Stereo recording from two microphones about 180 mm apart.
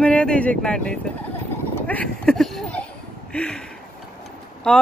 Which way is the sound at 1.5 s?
10° left (ahead or behind).